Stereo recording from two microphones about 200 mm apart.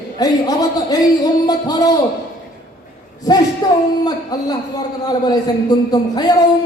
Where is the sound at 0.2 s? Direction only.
20° left (ahead or behind).